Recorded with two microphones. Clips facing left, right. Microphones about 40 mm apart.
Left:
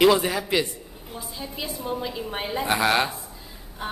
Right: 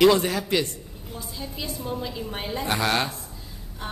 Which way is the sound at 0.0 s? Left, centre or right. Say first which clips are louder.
Even; centre.